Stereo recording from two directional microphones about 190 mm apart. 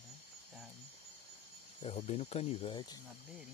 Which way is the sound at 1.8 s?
35° left (ahead or behind).